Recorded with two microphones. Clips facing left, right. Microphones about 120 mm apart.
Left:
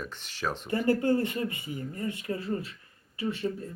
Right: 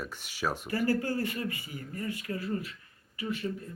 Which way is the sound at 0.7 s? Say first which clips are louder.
Left 5 dB; 25° left (ahead or behind).